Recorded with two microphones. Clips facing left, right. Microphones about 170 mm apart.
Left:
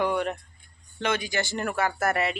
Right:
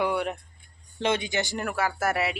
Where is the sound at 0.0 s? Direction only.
10° right (ahead or behind).